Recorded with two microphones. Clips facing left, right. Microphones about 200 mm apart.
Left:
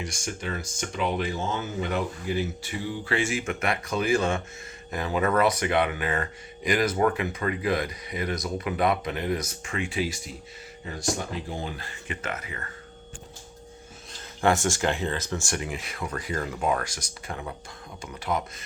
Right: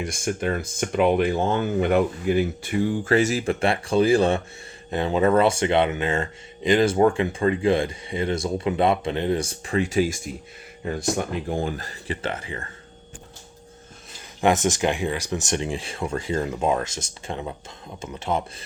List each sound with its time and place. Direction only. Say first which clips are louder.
0.0 s speech: right 8 dB; 55° right (ahead or behind); by 12.6 s 30° right (ahead or behind)
14.4 s speech: right 3 dB; 20° right (ahead or behind)